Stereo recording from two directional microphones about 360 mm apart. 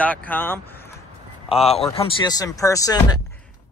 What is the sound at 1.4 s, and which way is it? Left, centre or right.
Speech, centre.